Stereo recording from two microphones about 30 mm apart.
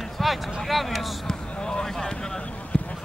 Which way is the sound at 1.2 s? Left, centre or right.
Left.